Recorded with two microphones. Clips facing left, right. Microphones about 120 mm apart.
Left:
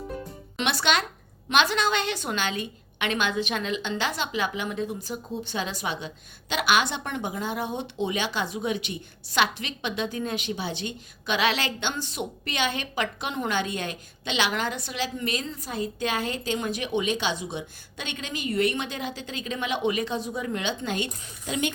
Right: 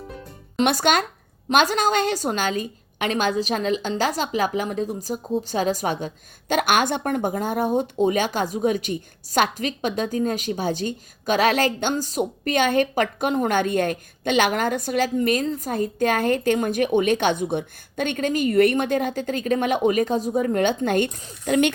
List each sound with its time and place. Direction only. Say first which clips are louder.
0.6 s a woman's voice: right 6 dB; 45° right (ahead or behind)